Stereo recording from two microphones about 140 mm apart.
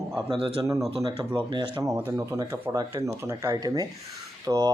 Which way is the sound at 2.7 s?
20° right (ahead or behind).